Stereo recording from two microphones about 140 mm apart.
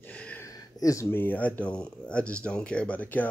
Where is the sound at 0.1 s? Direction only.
10° left (ahead or behind).